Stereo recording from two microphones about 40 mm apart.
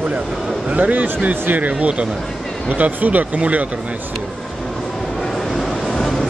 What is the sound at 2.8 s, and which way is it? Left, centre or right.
Speech, right.